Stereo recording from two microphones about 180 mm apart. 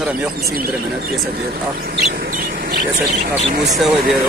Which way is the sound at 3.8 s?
Centre (ahead or behind).